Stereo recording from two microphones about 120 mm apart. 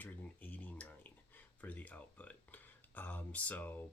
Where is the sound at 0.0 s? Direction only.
15° left (ahead or behind).